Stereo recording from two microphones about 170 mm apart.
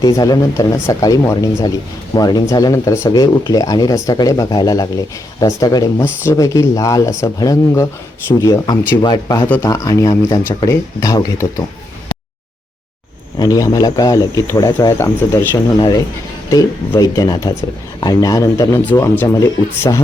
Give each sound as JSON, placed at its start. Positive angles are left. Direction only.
{"t": 0.0, "sound": "speech", "side_deg": 20}
{"t": 13.4, "sound": "speech", "side_deg": 20}